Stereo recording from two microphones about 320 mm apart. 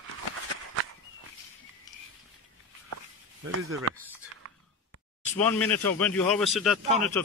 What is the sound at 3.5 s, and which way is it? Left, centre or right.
Speech, right.